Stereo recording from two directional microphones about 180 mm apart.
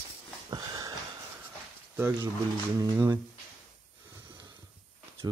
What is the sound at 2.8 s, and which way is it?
Speech, 15° right (ahead or behind).